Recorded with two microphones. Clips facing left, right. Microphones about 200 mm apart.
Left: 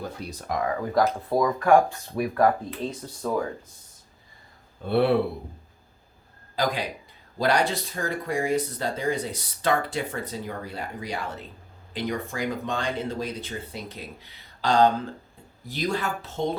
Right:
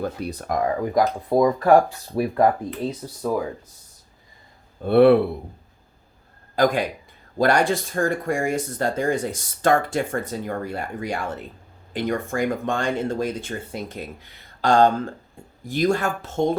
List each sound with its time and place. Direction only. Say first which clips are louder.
0.2 s speech: right 5 dB; 55° right (ahead or behind)
0.8 s speech: right 2 dB; 15° right (ahead or behind)
2.6 s speech: right 4 dB; 5° right (ahead or behind)
4.9 s speech: right 8 dB; 55° right (ahead or behind)
6.6 s speech: right 7 dB; 50° right (ahead or behind)